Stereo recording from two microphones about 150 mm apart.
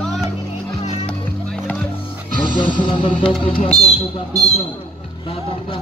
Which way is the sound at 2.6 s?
35° left (ahead or behind).